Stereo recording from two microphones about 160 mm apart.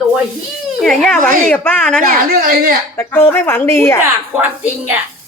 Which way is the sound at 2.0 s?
60° right (ahead or behind).